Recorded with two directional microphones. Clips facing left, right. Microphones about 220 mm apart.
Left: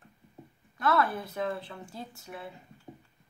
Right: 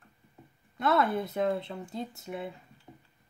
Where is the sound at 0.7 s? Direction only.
20° right (ahead or behind).